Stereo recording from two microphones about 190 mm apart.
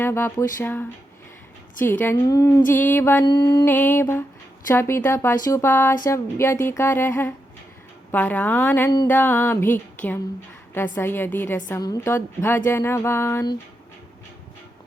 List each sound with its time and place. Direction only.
0.0 s a woman's voice: 10° left (ahead or behind)
3.2 s mantra: 20° left (ahead or behind)
3.7 s a woman's voice: 10° left (ahead or behind)